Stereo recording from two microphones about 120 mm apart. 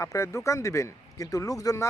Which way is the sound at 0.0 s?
25° left (ahead or behind).